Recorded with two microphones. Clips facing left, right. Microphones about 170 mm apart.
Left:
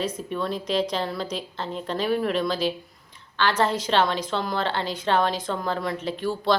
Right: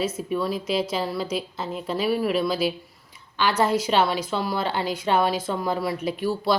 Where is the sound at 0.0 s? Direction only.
5° right (ahead or behind).